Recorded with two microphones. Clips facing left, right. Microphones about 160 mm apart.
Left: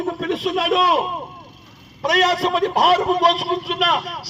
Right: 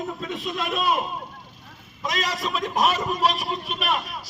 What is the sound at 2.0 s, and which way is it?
A man's voice, 70° left (ahead or behind).